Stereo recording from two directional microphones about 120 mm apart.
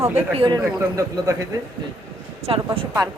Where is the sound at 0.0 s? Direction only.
60° right (ahead or behind).